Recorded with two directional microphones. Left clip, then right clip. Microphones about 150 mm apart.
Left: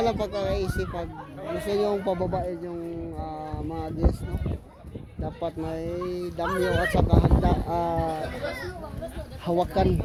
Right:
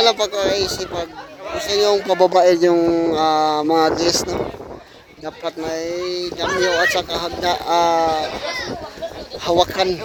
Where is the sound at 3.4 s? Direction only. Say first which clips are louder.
Right 18 dB; 80° right.